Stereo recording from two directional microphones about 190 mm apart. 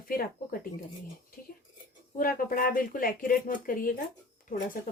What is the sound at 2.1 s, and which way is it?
Speech, 50° left (ahead or behind).